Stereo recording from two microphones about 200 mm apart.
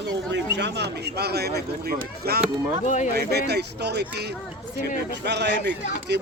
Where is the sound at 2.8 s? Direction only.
35° left (ahead or behind).